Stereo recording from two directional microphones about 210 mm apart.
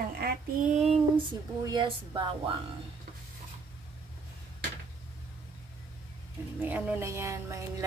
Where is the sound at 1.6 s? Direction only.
20° right (ahead or behind).